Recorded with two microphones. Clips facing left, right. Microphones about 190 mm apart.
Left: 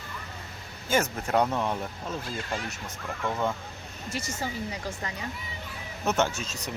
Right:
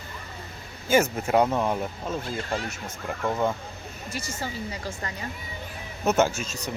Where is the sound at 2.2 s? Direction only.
30° right (ahead or behind).